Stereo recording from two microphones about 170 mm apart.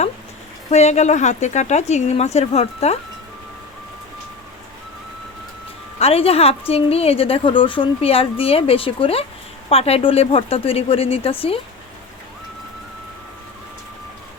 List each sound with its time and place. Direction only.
0.7 s a woman's voice: 40° left (ahead or behind)
6.0 s a woman's voice: 35° left (ahead or behind)